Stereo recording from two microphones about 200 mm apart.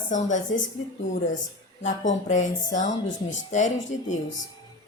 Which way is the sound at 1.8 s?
35° left (ahead or behind).